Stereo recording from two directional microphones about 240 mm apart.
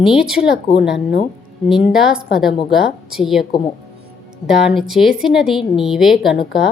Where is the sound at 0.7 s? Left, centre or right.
Left.